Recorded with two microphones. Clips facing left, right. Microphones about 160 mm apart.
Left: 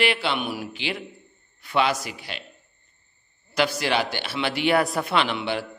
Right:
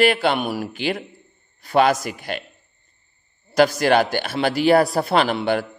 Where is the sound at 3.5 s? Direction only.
45° right (ahead or behind).